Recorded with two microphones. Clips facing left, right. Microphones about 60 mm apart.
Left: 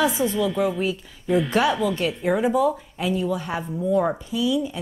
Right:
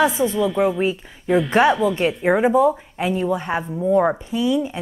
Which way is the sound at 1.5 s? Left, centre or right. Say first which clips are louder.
Right 5 dB; right.